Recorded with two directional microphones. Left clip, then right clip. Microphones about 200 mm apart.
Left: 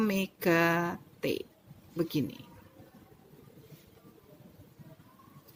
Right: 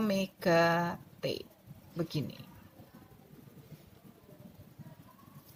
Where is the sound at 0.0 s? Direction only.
40° left (ahead or behind).